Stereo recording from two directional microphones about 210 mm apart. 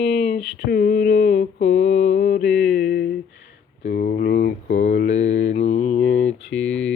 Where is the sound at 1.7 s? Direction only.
35° left (ahead or behind).